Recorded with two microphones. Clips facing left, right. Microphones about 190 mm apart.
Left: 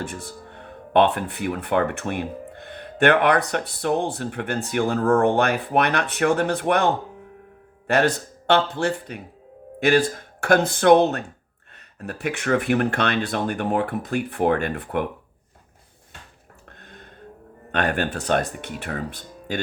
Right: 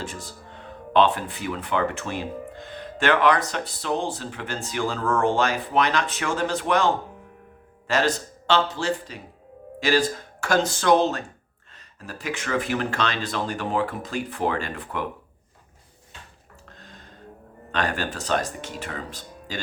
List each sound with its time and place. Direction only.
0.0 s speech: 60° left (ahead or behind)
16.6 s music: 60° left (ahead or behind)
17.7 s speech: 60° left (ahead or behind)